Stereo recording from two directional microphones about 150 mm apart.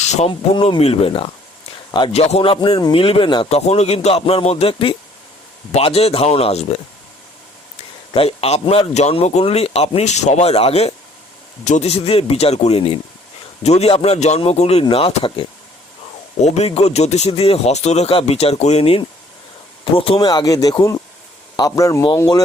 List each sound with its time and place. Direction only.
0.0 s speech: 50° left (ahead or behind)
0.3 s speech: 35° left (ahead or behind)
3.5 s speech: 45° left (ahead or behind)
8.1 s speech: 40° left (ahead or behind)
16.4 s speech: 45° left (ahead or behind)
20.1 s speech: 25° left (ahead or behind)